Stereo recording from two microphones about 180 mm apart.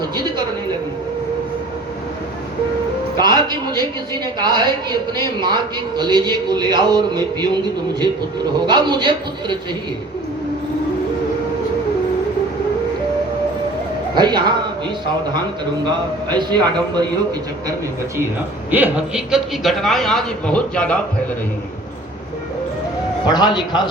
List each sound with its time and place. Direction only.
3.2 s a woman's voice: 25° right (ahead or behind)
8.6 s a man's voice: 25° right (ahead or behind)
14.2 s a man's voice: 25° right (ahead or behind)
16.3 s a man's voice: 25° right (ahead or behind)
18.7 s a man's voice: 10° right (ahead or behind); by 21.0 s 5° left (ahead or behind)
23.2 s a man's voice: 25° left (ahead or behind)